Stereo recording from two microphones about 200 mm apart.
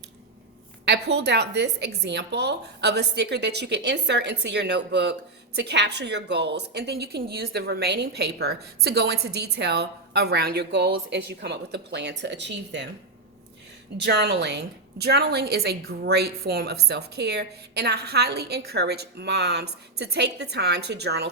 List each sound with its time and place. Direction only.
0.9 s a woman's voice: 55° right (ahead or behind)
14.0 s a woman's voice: 55° right (ahead or behind)